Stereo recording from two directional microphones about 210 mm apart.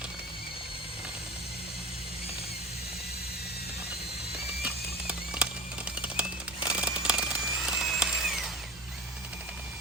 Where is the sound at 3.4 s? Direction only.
50° left (ahead or behind).